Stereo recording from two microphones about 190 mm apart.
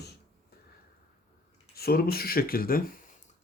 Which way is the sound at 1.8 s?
55° left (ahead or behind).